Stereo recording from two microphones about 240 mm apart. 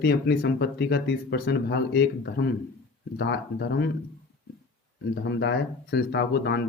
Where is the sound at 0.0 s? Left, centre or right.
Left.